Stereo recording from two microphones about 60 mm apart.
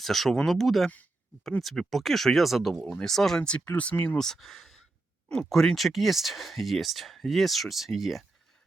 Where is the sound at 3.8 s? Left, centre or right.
Left.